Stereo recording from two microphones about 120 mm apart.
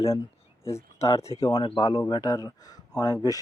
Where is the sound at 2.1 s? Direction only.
30° left (ahead or behind).